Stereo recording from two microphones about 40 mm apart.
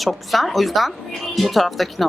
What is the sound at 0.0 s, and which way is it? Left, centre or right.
Speech, centre.